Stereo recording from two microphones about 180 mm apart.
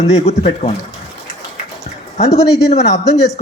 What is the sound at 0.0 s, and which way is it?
Speech, 35° left (ahead or behind).